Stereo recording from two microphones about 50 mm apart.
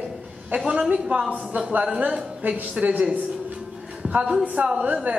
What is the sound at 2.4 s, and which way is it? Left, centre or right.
Speech, right.